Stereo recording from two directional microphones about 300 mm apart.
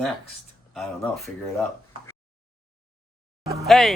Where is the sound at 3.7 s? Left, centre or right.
Centre.